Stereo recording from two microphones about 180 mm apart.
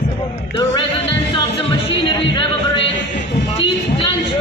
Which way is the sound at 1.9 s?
30° left (ahead or behind).